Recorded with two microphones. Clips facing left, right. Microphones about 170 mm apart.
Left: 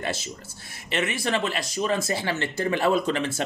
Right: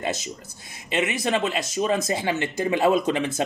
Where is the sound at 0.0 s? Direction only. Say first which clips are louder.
Right 2 dB; 20° right (ahead or behind).